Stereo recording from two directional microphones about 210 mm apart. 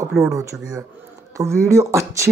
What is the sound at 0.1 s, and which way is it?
Speech, centre (ahead or behind).